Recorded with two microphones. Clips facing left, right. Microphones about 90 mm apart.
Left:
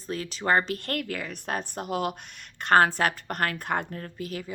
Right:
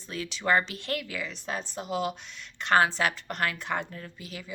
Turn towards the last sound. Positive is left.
turn(degrees=45)  # may be behind; listen again after turning